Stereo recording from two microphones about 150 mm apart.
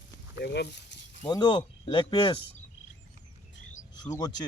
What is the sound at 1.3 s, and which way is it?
Speech, 30° left (ahead or behind).